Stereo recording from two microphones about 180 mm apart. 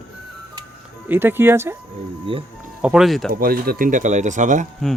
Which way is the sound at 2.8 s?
5° right (ahead or behind).